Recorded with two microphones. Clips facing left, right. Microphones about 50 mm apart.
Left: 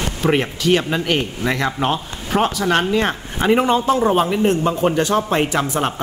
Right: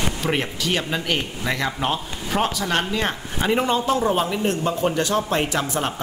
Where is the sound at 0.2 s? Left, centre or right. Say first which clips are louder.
Left 10 dB; left.